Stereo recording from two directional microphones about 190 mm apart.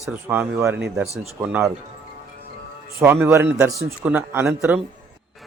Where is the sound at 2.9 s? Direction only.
10° right (ahead or behind).